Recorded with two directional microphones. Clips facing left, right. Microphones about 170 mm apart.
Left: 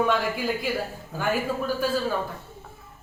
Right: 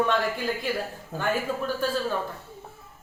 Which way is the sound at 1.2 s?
5° left (ahead or behind).